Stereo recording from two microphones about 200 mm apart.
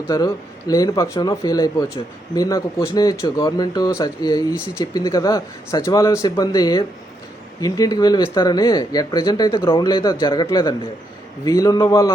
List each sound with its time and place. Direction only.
0.1 s speech: 15° left (ahead or behind)